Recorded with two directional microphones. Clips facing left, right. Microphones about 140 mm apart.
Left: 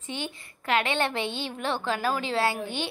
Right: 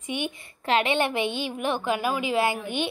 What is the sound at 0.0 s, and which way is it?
A woman's voice, 15° right (ahead or behind).